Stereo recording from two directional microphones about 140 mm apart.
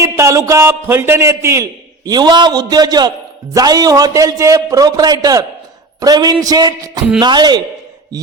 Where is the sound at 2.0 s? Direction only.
30° right (ahead or behind).